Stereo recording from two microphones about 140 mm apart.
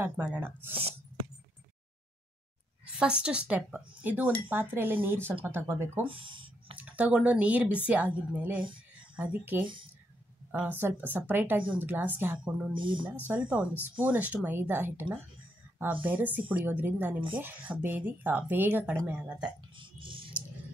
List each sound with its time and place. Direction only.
0.0 s speech: 15° right (ahead or behind)
3.0 s speech: 5° right (ahead or behind)
6.0 s a sound: 35° right (ahead or behind)
6.8 s speech: 10° right (ahead or behind)
12.7 s speech: 35° right (ahead or behind)
13.3 s speech: 10° right (ahead or behind)
19.8 s a sound: 35° right (ahead or behind)